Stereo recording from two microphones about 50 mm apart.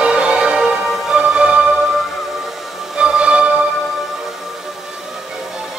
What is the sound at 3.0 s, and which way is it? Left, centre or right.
Music, right.